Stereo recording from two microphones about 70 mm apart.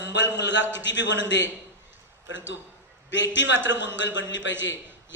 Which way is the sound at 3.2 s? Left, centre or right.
Right.